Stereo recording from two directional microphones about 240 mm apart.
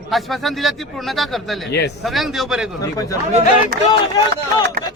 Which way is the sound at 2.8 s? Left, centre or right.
Centre.